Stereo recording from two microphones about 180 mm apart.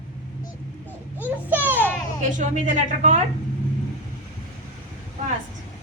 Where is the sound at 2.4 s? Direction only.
40° right (ahead or behind).